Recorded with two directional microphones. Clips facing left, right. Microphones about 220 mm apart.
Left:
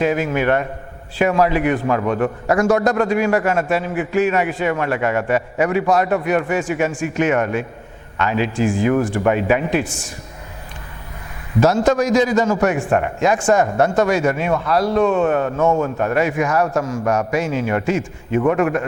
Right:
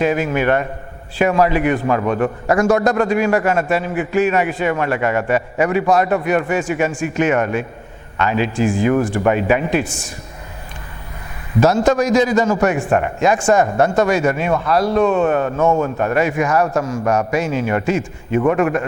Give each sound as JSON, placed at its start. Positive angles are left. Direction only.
{"t": 0.0, "sound": "a man's voice", "side_deg": -15}
{"t": 11.6, "sound": "a man's voice", "side_deg": -10}
{"t": 16.8, "sound": "a man's voice", "side_deg": -25}
{"t": 17.1, "sound": "a man's voice", "side_deg": -10}